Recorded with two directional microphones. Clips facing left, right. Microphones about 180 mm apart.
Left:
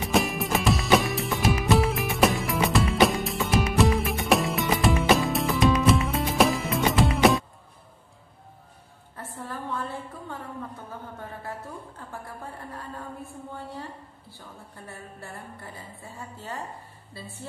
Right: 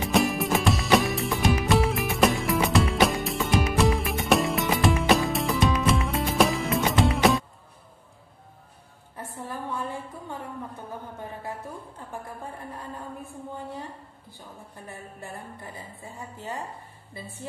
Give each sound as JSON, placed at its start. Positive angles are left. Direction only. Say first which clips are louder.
{"t": 0.1, "sound": "music", "louder": "right 1 dB", "side_deg": 0}
{"t": 9.1, "sound": "a sound", "louder": "right 1 dB", "side_deg": -15}
{"t": 12.1, "sound": "music", "louder": "right 2 dB", "side_deg": -15}
{"t": 14.9, "sound": "a woman's voice", "louder": "right 2 dB", "side_deg": -15}